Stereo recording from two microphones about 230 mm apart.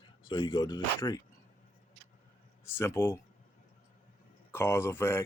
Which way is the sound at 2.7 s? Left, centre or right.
Centre.